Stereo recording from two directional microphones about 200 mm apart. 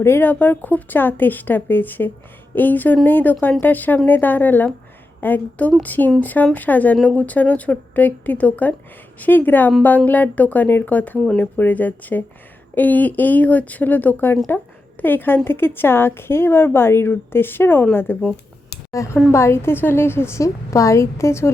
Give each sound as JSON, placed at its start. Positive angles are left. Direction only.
{"t": 0.0, "sound": "a woman's voice", "side_deg": 10}